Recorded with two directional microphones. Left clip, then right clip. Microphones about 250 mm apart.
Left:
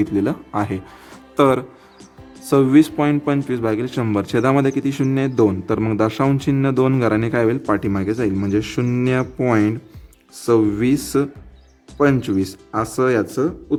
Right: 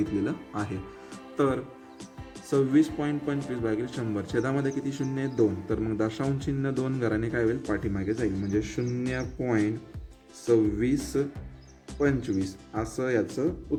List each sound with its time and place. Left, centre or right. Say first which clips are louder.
0.3 s speech: left 11 dB; left
2.5 s speech: left 10 dB; left